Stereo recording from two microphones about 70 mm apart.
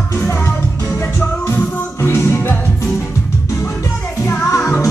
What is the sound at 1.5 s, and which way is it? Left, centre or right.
Music, left.